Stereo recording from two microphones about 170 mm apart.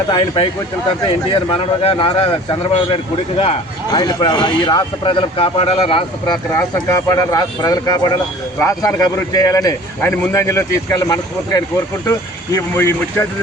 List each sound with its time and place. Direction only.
0.1 s speech: 35° left (ahead or behind)
6.8 s a man's voice: 20° left (ahead or behind)